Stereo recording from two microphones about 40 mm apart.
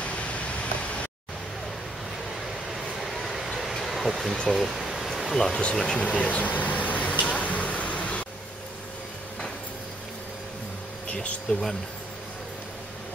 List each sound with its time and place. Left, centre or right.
0.0 s vehicle: left
2.7 s vehicle: centre
3.4 s a sound: centre
5.8 s speech: centre
6.0 s speech: left
7.3 s a sound: left
11.5 s speech: left